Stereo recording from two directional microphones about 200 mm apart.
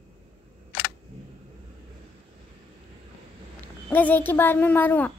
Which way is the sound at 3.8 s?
10° left (ahead or behind).